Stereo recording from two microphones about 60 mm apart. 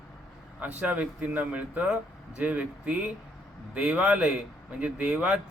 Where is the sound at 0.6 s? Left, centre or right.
Right.